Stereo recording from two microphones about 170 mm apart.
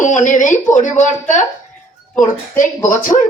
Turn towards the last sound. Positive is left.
turn(degrees=50)  # may be behind; listen again after turning